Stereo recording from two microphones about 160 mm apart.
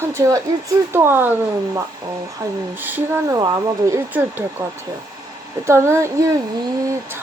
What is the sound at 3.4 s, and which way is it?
Speech, 20° right (ahead or behind).